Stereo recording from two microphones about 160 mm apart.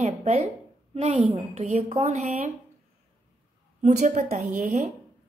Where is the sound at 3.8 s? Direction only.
50° right (ahead or behind).